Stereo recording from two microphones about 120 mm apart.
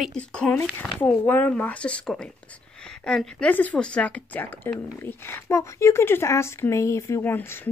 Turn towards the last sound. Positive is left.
turn(degrees=15)  # may be behind; listen again after turning